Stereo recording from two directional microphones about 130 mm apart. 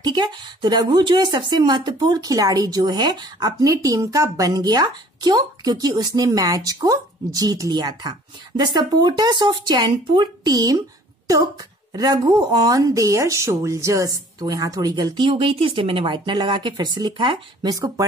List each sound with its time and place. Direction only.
0.0 s speech: 35° right (ahead or behind)
11.9 s speech: 30° right (ahead or behind)